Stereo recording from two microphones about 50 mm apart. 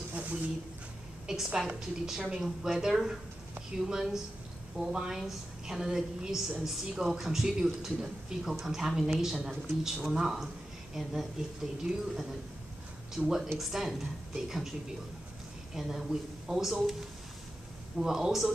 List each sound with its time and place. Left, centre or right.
0.1 s a sound: right
1.2 s a woman's voice: centre
13.2 s speech: right
13.6 s a woman's voice: centre
15.7 s a woman's voice: centre
17.9 s a woman's voice: centre